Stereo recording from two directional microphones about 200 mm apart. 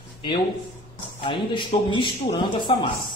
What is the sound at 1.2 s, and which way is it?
Speech, 25° left (ahead or behind).